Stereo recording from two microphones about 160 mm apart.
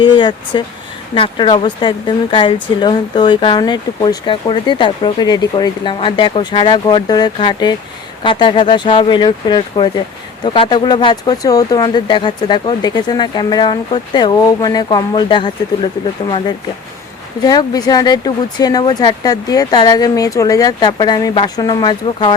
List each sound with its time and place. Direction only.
0.0 s speech: 30° left (ahead or behind)
17.4 s speech: 25° left (ahead or behind)